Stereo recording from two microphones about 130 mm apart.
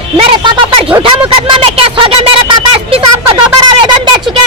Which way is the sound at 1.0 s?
45° right (ahead or behind).